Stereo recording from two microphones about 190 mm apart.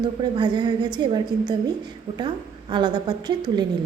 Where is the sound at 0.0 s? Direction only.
25° right (ahead or behind).